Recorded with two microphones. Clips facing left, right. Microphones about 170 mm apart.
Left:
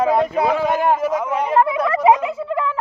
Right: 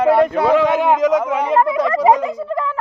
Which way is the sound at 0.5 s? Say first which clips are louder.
Right 4 dB; 90° right.